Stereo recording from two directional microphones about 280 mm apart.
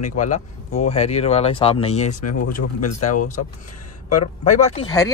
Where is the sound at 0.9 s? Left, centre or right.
Left.